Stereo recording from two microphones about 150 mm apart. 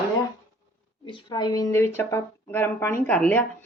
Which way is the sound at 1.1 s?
30° left (ahead or behind).